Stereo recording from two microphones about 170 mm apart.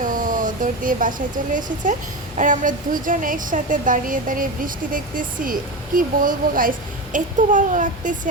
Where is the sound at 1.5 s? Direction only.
50° right (ahead or behind).